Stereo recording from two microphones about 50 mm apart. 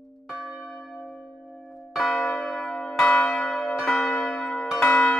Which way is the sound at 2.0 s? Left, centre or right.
Centre.